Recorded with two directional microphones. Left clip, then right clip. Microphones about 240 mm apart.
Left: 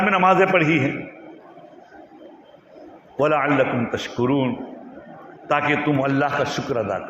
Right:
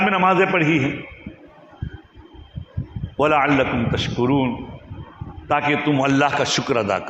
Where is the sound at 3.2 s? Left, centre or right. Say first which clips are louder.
Right 1 dB; right.